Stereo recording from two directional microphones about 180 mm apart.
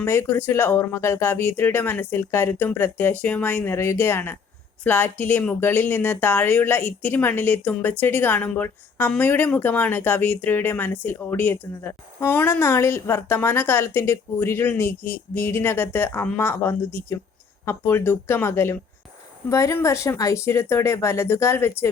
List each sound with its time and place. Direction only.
0.0 s speech: 15° left (ahead or behind)